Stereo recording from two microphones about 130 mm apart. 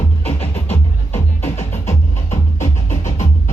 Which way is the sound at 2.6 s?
65° left (ahead or behind).